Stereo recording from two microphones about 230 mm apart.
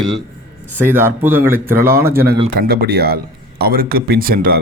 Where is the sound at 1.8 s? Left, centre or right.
Right.